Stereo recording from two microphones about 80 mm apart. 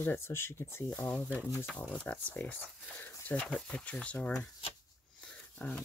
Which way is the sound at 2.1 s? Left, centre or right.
Left.